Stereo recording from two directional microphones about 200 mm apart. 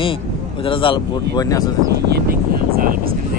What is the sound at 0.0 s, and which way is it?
A man's voice, 25° left (ahead or behind).